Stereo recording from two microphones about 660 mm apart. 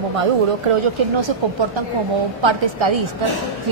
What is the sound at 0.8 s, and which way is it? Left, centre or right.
A woman's voice, right.